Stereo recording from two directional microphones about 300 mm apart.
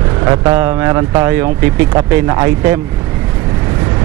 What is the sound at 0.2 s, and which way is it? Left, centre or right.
Speech, centre.